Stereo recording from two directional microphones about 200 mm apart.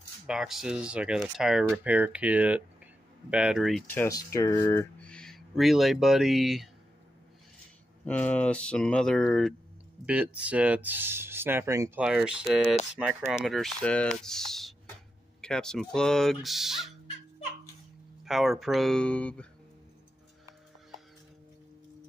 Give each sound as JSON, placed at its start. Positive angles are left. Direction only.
{"t": 0.3, "sound": "speech", "side_deg": 0}
{"t": 3.9, "sound": "speech", "side_deg": 10}
{"t": 5.0, "sound": "speech", "side_deg": 5}
{"t": 8.0, "sound": "speech", "side_deg": 5}
{"t": 18.2, "sound": "speech", "side_deg": 0}